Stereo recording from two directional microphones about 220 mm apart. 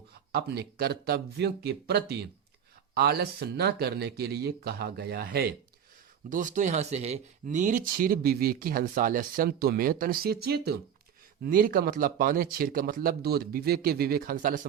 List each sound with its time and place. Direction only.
0.3 s speech: 45° right (ahead or behind)